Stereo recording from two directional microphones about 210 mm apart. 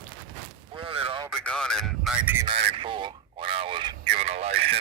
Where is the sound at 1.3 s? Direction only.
5° left (ahead or behind).